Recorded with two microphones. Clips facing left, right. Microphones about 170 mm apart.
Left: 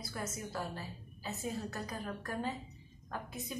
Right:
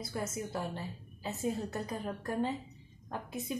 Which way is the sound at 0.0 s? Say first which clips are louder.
Right 4 dB; 25° right (ahead or behind).